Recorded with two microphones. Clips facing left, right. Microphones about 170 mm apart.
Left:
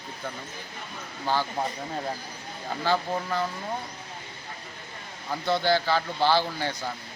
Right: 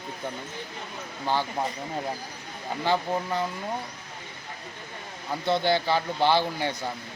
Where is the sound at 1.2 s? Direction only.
20° right (ahead or behind).